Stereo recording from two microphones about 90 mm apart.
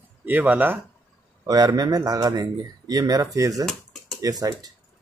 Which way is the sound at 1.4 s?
45° right (ahead or behind).